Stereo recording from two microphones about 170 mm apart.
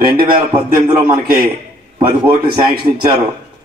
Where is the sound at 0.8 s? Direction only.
25° right (ahead or behind).